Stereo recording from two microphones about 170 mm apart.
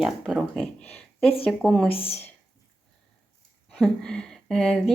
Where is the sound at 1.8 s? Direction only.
35° left (ahead or behind).